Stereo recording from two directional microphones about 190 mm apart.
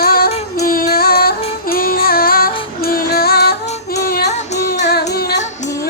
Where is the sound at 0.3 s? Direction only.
35° left (ahead or behind).